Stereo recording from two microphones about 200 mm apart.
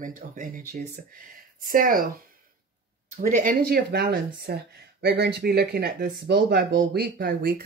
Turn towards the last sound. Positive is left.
turn(degrees=-50)  # may be behind; listen again after turning